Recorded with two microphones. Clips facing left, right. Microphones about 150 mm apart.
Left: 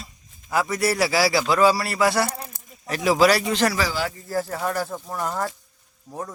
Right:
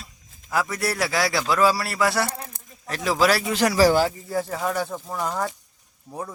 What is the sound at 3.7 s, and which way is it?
Speech, 40° right (ahead or behind).